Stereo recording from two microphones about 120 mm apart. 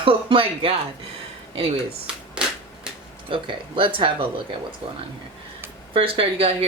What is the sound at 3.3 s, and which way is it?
Speech, 45° right (ahead or behind).